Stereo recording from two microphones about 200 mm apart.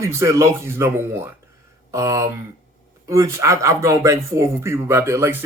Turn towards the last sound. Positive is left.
turn(degrees=-15)  # may be behind; listen again after turning